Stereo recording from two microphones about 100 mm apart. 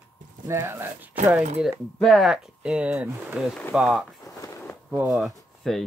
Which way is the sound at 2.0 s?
Centre (ahead or behind).